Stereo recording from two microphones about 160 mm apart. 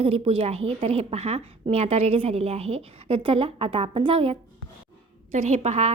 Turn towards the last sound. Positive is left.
turn(degrees=-45)  # may be behind; listen again after turning